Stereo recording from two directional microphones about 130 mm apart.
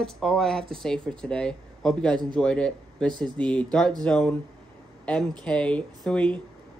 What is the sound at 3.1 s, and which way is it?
Speech, 35° right (ahead or behind).